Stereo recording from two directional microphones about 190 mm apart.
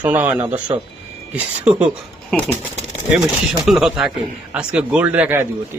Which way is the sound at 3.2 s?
Centre (ahead or behind).